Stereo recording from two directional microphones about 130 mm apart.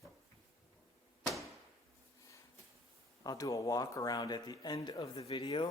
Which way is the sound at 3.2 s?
30° left (ahead or behind).